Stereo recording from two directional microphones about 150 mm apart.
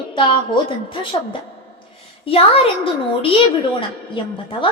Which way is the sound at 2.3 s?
40° left (ahead or behind).